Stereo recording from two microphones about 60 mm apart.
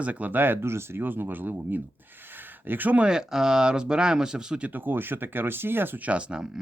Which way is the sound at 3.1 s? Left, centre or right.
Centre.